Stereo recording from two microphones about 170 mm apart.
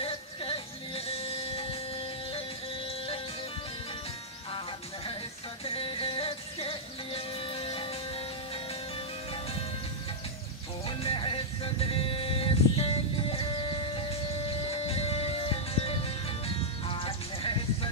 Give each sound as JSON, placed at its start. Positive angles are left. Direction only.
{"t": 0.0, "sound": "music", "side_deg": 30}
{"t": 5.8, "sound": "music", "side_deg": 30}
{"t": 10.9, "sound": "music", "side_deg": 30}